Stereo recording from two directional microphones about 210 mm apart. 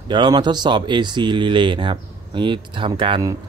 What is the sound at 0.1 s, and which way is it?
Speech, 20° right (ahead or behind).